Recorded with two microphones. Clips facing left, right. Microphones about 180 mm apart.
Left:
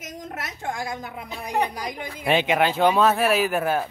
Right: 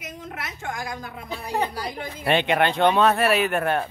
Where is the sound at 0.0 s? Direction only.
40° left (ahead or behind).